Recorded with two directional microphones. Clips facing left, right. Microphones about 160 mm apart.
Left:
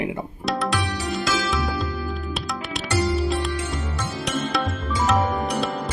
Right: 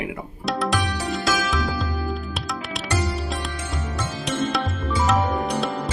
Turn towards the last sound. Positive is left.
turn(degrees=0)  # may be behind; listen again after turning